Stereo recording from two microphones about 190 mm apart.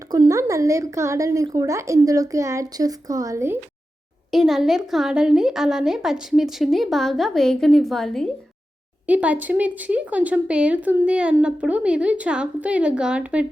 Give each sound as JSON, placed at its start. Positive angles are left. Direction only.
{"t": 0.1, "sound": "a woman's voice", "side_deg": -20}
{"t": 4.3, "sound": "a woman's voice", "side_deg": 0}